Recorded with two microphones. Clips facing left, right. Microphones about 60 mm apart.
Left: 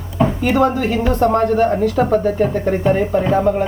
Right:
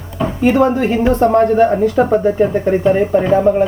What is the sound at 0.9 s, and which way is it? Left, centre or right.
Speech, right.